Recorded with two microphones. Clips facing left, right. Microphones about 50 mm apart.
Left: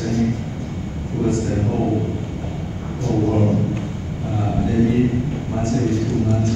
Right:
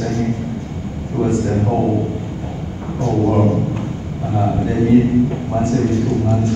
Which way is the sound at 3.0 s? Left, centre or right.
Right.